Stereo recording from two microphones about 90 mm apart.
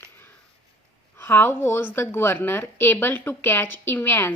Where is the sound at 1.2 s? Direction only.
25° left (ahead or behind).